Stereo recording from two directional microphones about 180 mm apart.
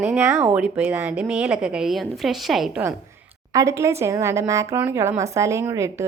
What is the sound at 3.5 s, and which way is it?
A woman's voice, 15° right (ahead or behind).